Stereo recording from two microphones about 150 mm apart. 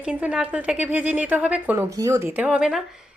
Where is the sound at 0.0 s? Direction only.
10° right (ahead or behind).